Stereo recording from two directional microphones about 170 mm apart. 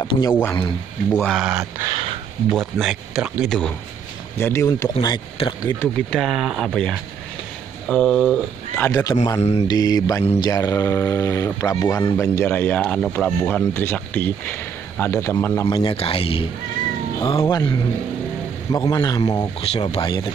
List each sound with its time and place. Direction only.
0.0 s speech: 25° left (ahead or behind)
1.2 s speech: centre (ahead or behind)
1.6 s a sound: 15° right (ahead or behind)
2.5 s speech: centre (ahead or behind)
4.4 s speech: 15° left (ahead or behind)
6.1 s speech: centre (ahead or behind)
8.8 s speech: 20° left (ahead or behind)
9.4 s a man's voice: 40° left (ahead or behind)
9.7 s speech: 20° left (ahead or behind)
15.7 s a man's voice: 30° left (ahead or behind)
19.7 s a man's voice: 35° left (ahead or behind)